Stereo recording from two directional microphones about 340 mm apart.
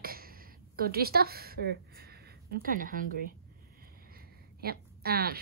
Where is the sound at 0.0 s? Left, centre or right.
Right.